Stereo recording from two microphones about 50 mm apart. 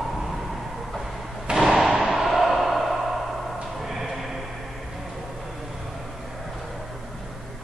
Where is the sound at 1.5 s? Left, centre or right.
Centre.